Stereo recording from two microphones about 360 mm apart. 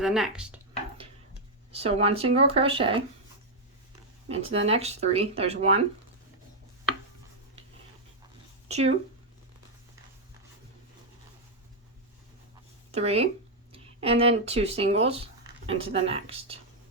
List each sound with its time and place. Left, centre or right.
0.0 s speech: centre
1.7 s speech: centre
4.5 s speech: centre
8.6 s speech: centre
12.9 s speech: centre